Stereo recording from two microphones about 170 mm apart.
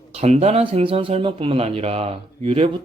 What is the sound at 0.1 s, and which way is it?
Speech, 40° right (ahead or behind).